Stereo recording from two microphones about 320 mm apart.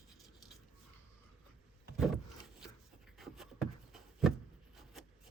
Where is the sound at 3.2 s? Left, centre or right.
Centre.